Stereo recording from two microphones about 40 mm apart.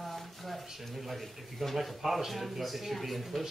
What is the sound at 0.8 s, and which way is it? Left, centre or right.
Speech, centre.